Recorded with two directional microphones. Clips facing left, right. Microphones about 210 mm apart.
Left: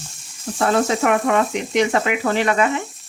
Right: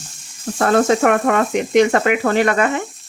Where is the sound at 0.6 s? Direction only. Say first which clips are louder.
Right 4 dB; 55° right (ahead or behind).